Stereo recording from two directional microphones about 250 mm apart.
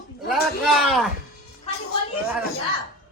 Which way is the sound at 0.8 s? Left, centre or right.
Centre.